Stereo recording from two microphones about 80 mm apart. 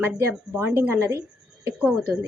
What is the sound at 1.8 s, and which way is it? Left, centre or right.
Speech, centre.